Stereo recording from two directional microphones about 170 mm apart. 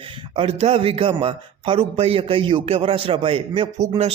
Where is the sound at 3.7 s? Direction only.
20° right (ahead or behind).